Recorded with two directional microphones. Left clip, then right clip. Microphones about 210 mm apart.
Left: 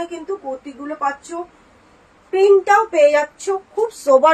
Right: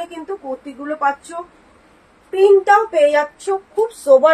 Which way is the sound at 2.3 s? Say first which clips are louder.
Right 1 dB; 15° left (ahead or behind).